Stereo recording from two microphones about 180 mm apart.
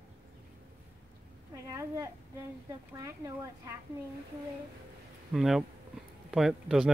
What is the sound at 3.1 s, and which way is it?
Speech, 20° right (ahead or behind).